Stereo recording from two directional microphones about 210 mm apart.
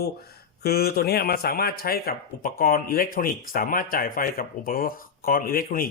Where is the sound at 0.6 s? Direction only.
50° left (ahead or behind).